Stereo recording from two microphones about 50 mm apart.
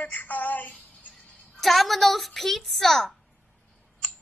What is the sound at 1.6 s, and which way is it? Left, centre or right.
A woman's voice, centre.